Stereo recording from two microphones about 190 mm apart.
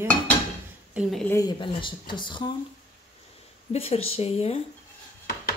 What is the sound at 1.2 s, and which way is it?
Speech, 15° left (ahead or behind).